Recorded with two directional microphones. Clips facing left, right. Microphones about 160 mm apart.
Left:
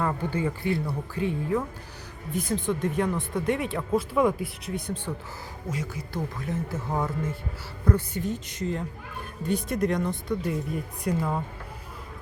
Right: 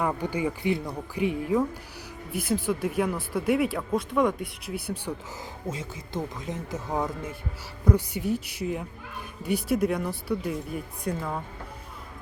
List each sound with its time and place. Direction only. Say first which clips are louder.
0.0 s speech: even; 15° right (ahead or behind)
5.6 s speech: left 2 dB; 25° right (ahead or behind); by 11.3 s centre (ahead or behind)